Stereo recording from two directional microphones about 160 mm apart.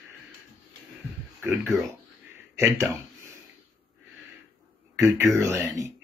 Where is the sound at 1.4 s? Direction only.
Centre (ahead or behind).